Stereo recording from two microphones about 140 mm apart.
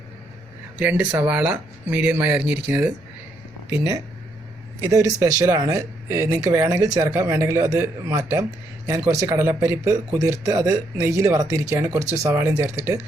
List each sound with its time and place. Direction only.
0.8 s speech: 10° right (ahead or behind)